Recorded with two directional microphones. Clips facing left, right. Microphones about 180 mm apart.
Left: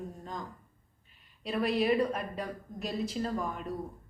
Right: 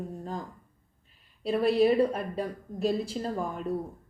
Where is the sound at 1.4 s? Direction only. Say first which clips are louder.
Right 6 dB; 30° right (ahead or behind).